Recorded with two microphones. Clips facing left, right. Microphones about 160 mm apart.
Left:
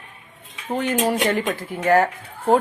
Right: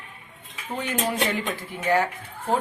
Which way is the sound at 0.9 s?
45° left (ahead or behind).